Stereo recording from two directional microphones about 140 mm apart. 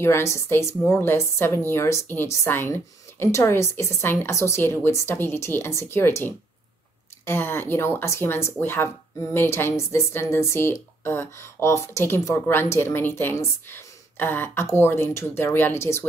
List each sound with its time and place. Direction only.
0.0 s a woman's voice: 20° left (ahead or behind)